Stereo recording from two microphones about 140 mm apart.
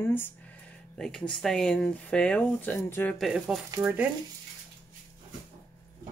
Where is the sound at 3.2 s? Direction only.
5° right (ahead or behind).